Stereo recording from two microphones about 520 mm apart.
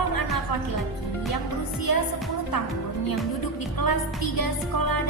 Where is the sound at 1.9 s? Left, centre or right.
Left.